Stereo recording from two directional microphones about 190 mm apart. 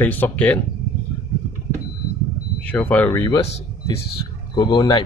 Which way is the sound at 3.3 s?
30° left (ahead or behind).